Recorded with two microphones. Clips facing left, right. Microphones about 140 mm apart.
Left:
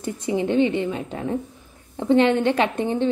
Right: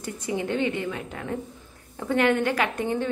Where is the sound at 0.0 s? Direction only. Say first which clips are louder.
Left 5 dB; 25° left (ahead or behind).